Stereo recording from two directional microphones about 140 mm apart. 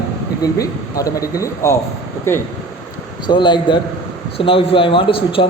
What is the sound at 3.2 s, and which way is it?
A man's voice, 35° left (ahead or behind).